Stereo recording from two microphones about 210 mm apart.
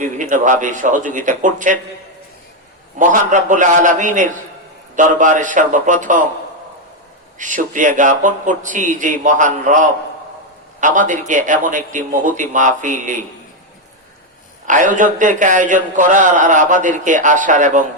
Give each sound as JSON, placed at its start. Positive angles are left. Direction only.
{"t": 0.0, "sound": "a man's voice", "side_deg": -35}
{"t": 3.0, "sound": "a man's voice", "side_deg": -35}
{"t": 7.3, "sound": "a man's voice", "side_deg": -35}
{"t": 14.7, "sound": "a man's voice", "side_deg": -40}